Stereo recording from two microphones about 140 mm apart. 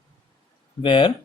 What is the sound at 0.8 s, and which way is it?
Speech, 35° left (ahead or behind).